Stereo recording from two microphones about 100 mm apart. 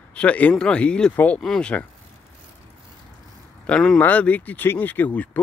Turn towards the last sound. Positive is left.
turn(degrees=15)  # may be behind; listen again after turning